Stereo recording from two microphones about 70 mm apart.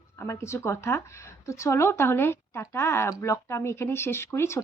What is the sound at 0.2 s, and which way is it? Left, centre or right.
Speech, left.